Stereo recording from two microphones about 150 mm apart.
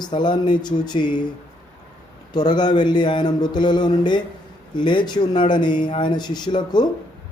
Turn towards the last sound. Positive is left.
turn(degrees=30)  # may be behind; listen again after turning